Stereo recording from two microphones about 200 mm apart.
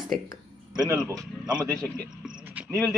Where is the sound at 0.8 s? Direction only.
15° right (ahead or behind).